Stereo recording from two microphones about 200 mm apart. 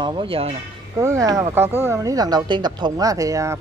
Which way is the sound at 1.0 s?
15° right (ahead or behind).